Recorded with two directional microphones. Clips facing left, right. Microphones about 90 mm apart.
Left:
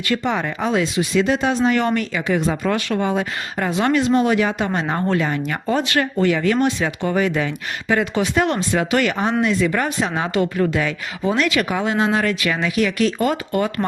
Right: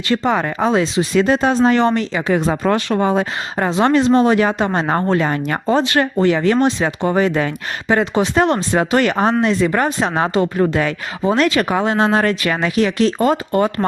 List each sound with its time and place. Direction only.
0.3 s speech: 45° right (ahead or behind)
0.7 s speech: 30° right (ahead or behind)
5.6 s speech: 30° right (ahead or behind)